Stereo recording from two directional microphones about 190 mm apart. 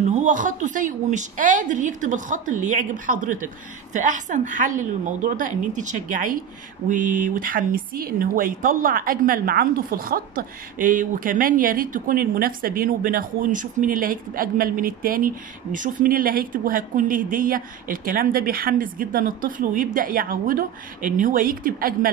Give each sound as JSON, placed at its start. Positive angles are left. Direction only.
{"t": 0.1, "sound": "a woman's voice", "side_deg": -40}